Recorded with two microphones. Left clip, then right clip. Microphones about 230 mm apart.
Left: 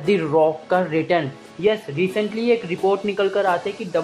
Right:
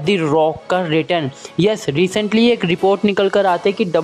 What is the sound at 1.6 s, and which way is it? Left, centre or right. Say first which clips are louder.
A woman's voice: right 4 dB; right.